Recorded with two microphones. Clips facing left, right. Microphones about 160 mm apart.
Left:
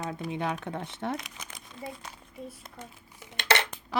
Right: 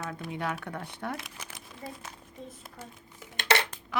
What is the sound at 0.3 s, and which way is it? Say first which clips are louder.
Speech: left 2 dB; 20° left (ahead or behind).